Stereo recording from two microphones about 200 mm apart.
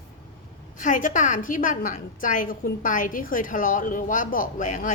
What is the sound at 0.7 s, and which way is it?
A woman's voice, 40° left (ahead or behind).